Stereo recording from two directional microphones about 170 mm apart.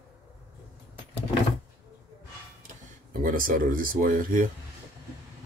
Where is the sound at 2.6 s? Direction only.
55° right (ahead or behind).